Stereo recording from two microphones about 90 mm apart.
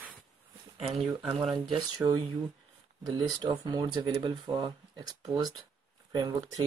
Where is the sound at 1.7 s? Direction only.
50° right (ahead or behind).